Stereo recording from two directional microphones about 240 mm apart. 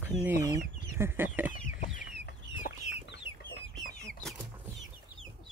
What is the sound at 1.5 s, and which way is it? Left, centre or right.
Chicken, left.